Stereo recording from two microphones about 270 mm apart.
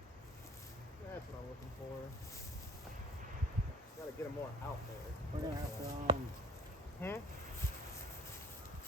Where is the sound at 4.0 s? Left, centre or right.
Centre.